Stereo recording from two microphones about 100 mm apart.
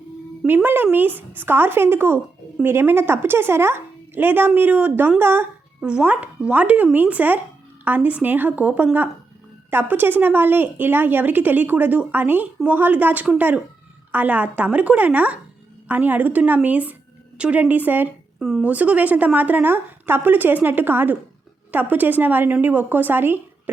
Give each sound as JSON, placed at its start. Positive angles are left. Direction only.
{"t": 0.4, "sound": "a woman's voice", "side_deg": -20}
{"t": 5.8, "sound": "a woman's voice", "side_deg": -10}
{"t": 18.3, "sound": "speech", "side_deg": -5}
{"t": 18.7, "sound": "a woman's voice", "side_deg": -15}